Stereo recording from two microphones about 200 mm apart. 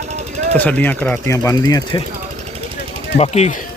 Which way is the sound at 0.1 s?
35° right (ahead or behind).